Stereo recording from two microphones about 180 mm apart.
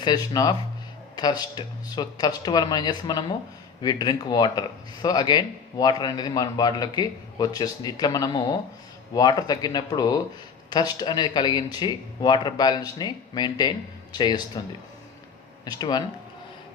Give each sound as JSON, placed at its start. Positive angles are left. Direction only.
{"t": 0.0, "sound": "speech", "side_deg": 20}
{"t": 15.6, "sound": "speech", "side_deg": 20}